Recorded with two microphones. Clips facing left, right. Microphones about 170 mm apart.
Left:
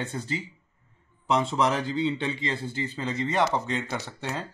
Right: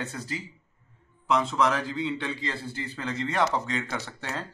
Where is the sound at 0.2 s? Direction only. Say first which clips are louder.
Left 3 dB; 20° left (ahead or behind).